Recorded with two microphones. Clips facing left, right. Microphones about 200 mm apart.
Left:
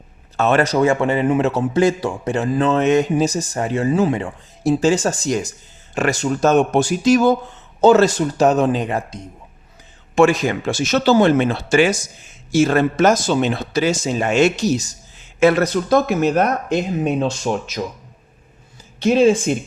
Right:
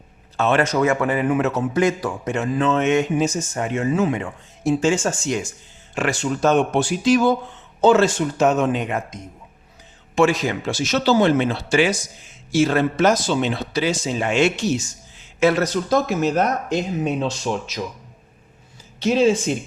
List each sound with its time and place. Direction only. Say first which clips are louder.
0.3 s a man's voice: left 3 dB; 45° left (ahead or behind)
10.2 s speech: left 3 dB; 50° left (ahead or behind)
15.4 s speech: left 3 dB; 55° left (ahead or behind)
18.9 s speech: left 3 dB; 55° left (ahead or behind)